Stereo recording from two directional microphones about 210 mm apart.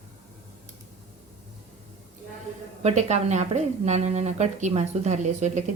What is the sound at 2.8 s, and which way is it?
Speech, 30° right (ahead or behind).